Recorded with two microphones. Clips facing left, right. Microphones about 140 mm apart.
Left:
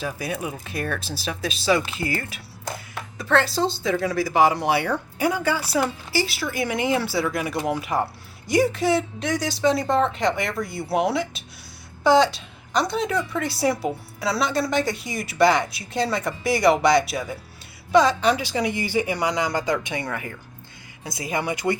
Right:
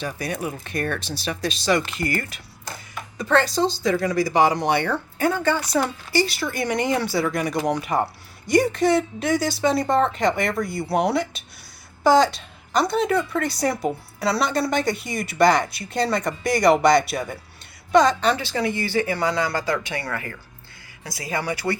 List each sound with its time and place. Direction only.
0.0 s a woman's voice: 5° left (ahead or behind)